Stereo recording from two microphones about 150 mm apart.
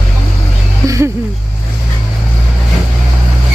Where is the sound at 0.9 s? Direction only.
20° right (ahead or behind).